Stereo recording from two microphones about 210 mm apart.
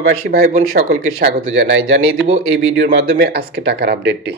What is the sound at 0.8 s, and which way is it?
Speech, 65° right (ahead or behind).